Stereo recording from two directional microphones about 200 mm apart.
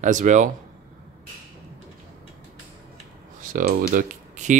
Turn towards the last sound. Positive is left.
turn(degrees=-40)  # may be behind; listen again after turning